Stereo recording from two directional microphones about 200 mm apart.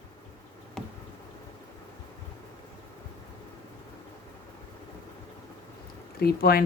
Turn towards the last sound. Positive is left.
turn(degrees=50)  # may be behind; listen again after turning